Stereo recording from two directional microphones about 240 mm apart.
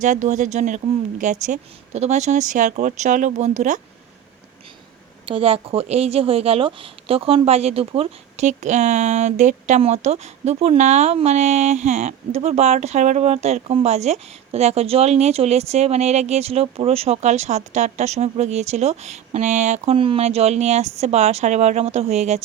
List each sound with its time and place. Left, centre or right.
0.0 s speech: right
5.2 s speech: right